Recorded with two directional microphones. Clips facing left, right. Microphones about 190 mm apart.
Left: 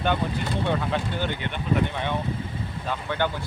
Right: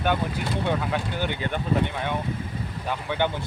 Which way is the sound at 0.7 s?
5° right (ahead or behind).